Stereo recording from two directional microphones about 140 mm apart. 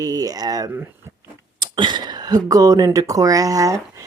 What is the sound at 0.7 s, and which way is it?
Speech, 15° right (ahead or behind).